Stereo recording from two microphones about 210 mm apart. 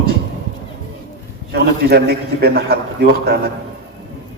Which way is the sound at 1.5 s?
50° right (ahead or behind).